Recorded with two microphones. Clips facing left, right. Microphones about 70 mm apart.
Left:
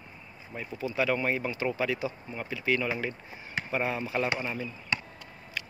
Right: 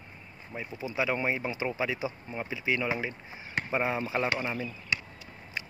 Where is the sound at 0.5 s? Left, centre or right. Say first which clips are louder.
Left 2 dB; centre.